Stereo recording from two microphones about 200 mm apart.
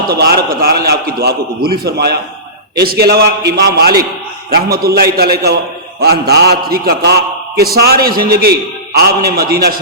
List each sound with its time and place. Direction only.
0.1 s a man's voice: 50° right (ahead or behind)